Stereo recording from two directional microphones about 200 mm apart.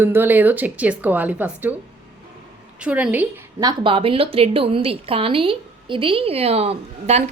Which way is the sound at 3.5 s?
20° right (ahead or behind).